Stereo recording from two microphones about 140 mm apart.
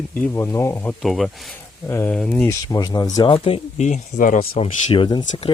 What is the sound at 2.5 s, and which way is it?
Speech, 25° left (ahead or behind).